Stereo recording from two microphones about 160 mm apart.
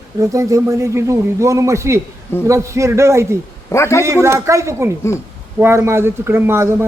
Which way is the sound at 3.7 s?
15° left (ahead or behind).